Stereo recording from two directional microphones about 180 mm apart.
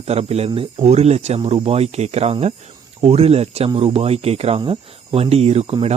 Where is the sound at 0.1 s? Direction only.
35° right (ahead or behind).